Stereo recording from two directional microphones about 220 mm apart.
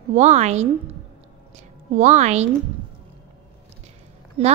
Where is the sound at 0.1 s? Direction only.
30° right (ahead or behind).